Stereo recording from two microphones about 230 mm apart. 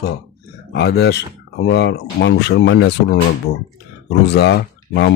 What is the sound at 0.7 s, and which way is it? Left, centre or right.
Speech, left.